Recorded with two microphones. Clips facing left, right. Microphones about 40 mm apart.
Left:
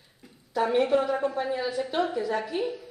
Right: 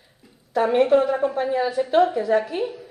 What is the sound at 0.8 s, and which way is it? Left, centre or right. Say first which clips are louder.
Speech: right 6 dB; centre.